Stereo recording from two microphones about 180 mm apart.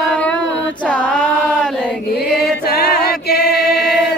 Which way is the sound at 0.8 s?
5° left (ahead or behind).